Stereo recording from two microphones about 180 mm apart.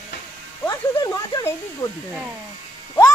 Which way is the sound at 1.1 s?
20° left (ahead or behind).